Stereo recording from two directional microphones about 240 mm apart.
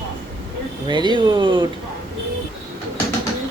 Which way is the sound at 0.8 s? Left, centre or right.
Centre.